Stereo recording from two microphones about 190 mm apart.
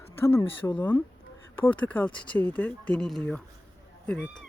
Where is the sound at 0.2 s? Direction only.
10° left (ahead or behind).